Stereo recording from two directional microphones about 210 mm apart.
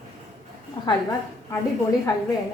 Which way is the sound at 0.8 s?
25° left (ahead or behind).